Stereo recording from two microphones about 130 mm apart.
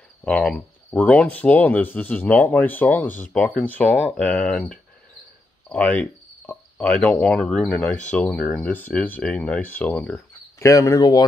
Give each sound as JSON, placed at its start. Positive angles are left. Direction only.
{"t": 0.2, "sound": "speech", "side_deg": 5}
{"t": 5.7, "sound": "cricket", "side_deg": 10}
{"t": 6.9, "sound": "speech", "side_deg": 10}
{"t": 10.6, "sound": "speech", "side_deg": 25}